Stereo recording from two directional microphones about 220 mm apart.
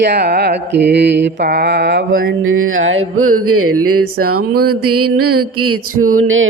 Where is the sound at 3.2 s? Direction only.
80° right.